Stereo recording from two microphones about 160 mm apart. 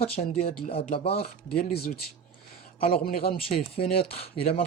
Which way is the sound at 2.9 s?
65° left (ahead or behind).